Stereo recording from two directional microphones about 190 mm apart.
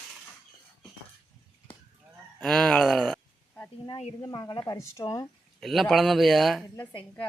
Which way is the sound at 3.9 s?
30° left (ahead or behind).